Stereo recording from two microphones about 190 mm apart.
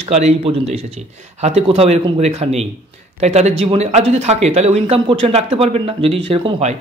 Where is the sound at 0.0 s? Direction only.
35° right (ahead or behind).